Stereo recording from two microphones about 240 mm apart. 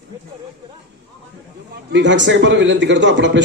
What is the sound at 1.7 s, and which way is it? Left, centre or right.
A man's voice, right.